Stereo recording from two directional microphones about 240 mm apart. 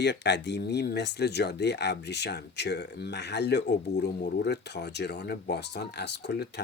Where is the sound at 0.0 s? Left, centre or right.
Left.